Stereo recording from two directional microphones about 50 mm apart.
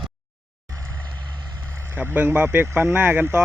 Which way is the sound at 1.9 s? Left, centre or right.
Right.